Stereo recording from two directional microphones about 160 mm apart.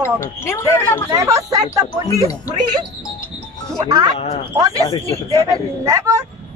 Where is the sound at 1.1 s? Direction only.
20° right (ahead or behind).